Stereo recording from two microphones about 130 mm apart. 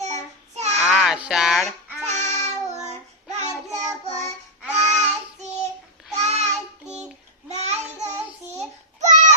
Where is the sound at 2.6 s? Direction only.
60° right (ahead or behind).